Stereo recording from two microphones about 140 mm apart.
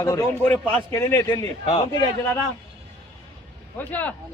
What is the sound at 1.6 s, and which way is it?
Speech, 50° left (ahead or behind).